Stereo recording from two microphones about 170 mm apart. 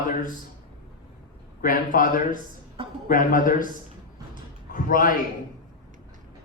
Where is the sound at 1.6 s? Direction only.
55° left (ahead or behind).